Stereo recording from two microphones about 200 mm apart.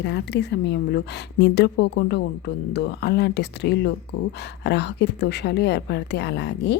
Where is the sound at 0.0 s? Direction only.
60° left (ahead or behind).